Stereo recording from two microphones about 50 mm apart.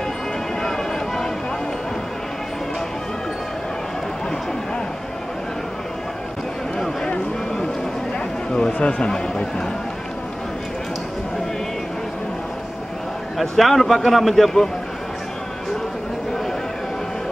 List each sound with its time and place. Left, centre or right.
0.6 s a sound: centre
8.7 s speech: centre
13.4 s a man's voice: centre